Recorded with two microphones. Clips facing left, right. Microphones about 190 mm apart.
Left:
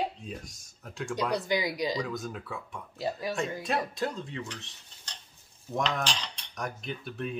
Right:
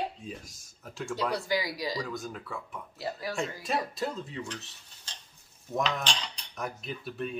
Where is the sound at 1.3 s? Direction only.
20° left (ahead or behind).